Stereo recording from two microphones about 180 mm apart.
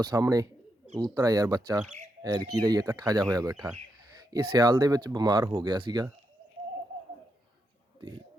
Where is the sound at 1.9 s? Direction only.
40° right (ahead or behind).